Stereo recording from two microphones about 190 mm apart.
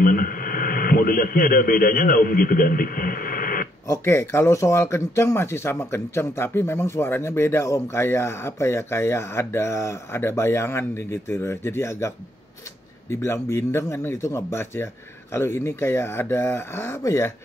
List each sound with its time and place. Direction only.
0.0 s radio: 50° left (ahead or behind)
3.8 s speech: 15° left (ahead or behind)
13.1 s speech: 15° left (ahead or behind)